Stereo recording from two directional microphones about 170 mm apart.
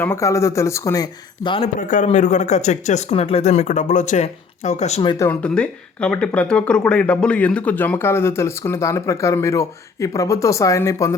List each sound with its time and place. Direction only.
0.0 s speech: 15° left (ahead or behind)
1.6 s speech: 50° left (ahead or behind)
5.0 s speech: 20° left (ahead or behind)
5.3 s speech: 5° left (ahead or behind)